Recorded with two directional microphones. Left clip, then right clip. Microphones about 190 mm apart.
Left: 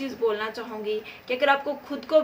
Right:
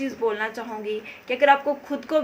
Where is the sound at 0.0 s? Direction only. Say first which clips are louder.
Right 1 dB; 15° right (ahead or behind).